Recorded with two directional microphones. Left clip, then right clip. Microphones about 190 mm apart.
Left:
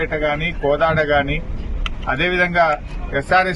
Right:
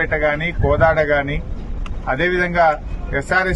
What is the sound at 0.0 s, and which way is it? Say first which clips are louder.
A man's voice: right 2 dB; 20° right (ahead or behind).